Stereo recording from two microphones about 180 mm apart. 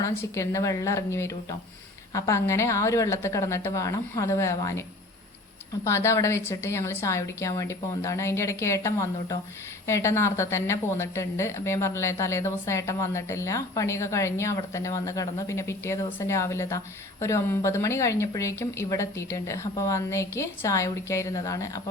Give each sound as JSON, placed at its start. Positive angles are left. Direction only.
{"t": 0.0, "sound": "speech", "side_deg": 15}
{"t": 5.8, "sound": "speech", "side_deg": 15}